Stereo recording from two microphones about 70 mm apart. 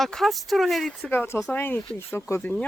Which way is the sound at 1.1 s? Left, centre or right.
Left.